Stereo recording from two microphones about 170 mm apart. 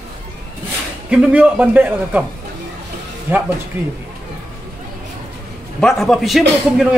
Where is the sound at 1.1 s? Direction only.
5° right (ahead or behind).